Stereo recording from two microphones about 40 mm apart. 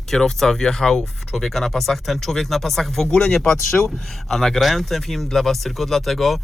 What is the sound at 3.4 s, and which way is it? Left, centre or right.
Speech, left.